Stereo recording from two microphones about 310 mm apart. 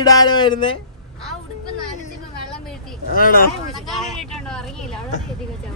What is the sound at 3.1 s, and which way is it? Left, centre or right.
Speech, left.